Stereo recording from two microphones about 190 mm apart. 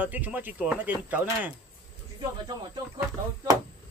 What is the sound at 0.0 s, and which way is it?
Speech, 10° right (ahead or behind).